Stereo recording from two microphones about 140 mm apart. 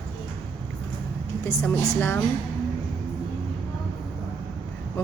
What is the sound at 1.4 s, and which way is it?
Speech, 20° left (ahead or behind).